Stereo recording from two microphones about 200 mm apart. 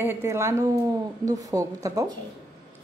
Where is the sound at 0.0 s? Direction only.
10° right (ahead or behind).